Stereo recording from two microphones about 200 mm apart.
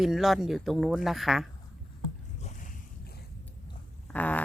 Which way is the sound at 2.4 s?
40° left (ahead or behind).